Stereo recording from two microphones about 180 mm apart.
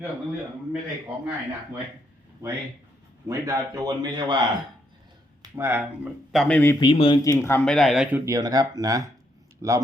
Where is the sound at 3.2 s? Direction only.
20° right (ahead or behind).